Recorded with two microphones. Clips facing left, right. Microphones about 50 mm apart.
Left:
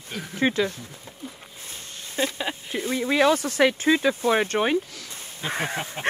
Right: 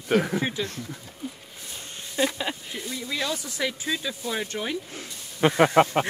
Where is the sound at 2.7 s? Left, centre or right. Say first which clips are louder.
Left 8 dB; left.